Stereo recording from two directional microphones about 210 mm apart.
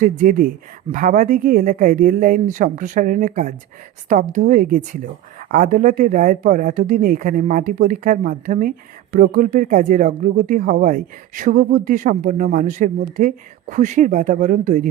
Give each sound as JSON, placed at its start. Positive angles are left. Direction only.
{"t": 0.0, "sound": "speech", "side_deg": -40}